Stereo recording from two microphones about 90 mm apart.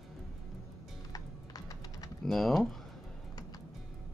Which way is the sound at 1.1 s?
40° left (ahead or behind).